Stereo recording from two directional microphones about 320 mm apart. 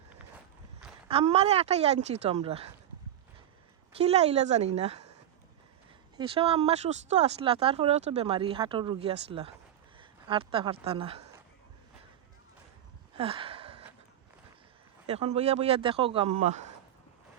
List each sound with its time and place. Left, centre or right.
1.0 s speech: centre
3.9 s speech: centre
6.1 s speech: centre
13.1 s a sound: centre
15.0 s speech: centre